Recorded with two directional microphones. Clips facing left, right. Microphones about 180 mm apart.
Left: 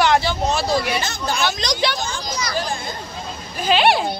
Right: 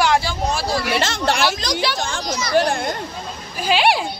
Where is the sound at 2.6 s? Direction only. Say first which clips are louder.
Right 10 dB; 70° right (ahead or behind).